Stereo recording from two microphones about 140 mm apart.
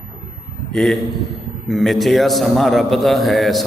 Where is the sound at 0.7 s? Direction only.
5° left (ahead or behind).